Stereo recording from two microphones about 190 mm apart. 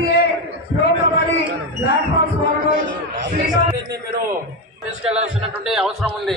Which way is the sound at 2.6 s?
45° right (ahead or behind).